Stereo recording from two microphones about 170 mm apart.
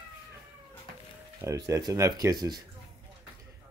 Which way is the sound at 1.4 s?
20° right (ahead or behind).